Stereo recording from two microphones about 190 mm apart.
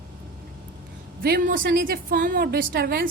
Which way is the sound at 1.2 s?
50° right (ahead or behind).